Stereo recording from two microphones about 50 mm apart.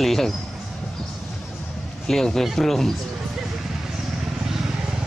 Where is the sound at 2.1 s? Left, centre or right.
Centre.